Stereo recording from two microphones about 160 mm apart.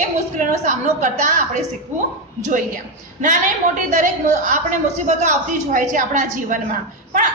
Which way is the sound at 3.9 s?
50° right (ahead or behind).